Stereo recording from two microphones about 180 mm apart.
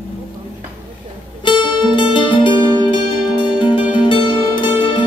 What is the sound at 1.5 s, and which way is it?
Music, 25° left (ahead or behind).